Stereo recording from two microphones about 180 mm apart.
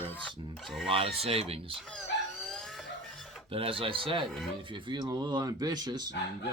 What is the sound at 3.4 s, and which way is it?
Speech, 30° right (ahead or behind).